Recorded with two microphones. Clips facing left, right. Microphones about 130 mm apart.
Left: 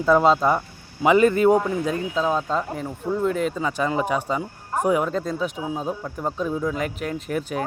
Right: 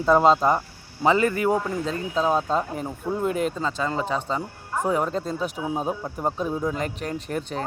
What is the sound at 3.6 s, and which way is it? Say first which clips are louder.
Speech: left 3 dB; 15° left (ahead or behind).